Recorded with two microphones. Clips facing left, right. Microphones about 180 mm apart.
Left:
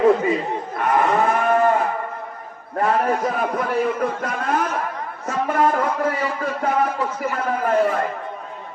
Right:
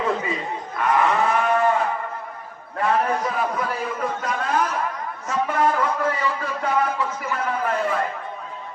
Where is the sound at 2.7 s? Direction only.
50° left (ahead or behind).